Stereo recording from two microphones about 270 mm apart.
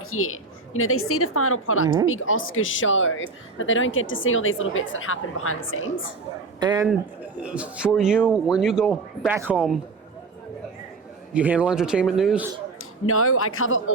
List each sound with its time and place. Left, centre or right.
0.1 s speech: left
6.6 s speech: centre
7.4 s speech: centre
11.3 s speech: centre
12.8 s a man's voice: left